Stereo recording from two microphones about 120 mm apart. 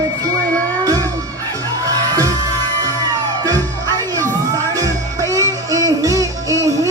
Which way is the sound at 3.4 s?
30° right (ahead or behind).